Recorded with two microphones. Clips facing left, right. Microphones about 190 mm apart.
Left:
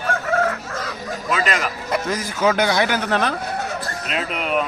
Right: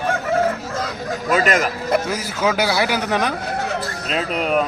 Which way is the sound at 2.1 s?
10° right (ahead or behind).